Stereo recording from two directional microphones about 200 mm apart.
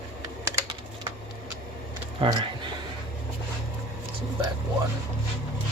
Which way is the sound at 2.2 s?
25° right (ahead or behind).